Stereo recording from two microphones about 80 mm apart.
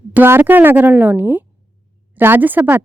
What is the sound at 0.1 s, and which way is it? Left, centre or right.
A woman's voice, right.